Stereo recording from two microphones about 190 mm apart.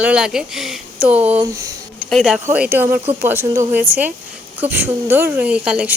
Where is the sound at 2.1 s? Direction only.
Centre (ahead or behind).